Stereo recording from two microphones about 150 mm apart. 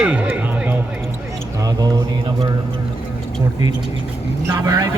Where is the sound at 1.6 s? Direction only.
25° right (ahead or behind).